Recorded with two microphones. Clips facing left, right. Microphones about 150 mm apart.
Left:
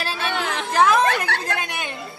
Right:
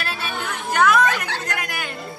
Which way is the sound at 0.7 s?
30° left (ahead or behind).